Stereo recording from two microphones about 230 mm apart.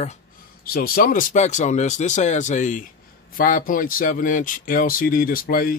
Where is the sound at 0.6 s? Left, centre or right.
Left.